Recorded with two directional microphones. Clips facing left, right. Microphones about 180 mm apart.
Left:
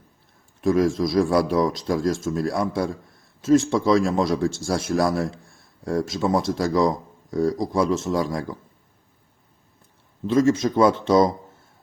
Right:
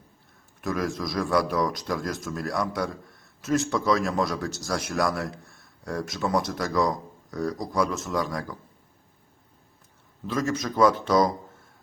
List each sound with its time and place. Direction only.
0.6 s speech: 25° left (ahead or behind)
10.2 s speech: 25° left (ahead or behind)